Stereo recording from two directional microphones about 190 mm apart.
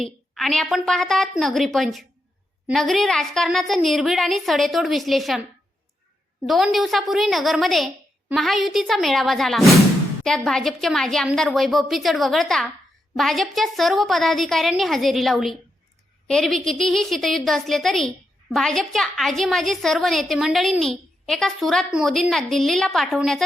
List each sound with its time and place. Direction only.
0.0 s a woman's voice: centre (ahead or behind)
6.4 s a woman's voice: centre (ahead or behind)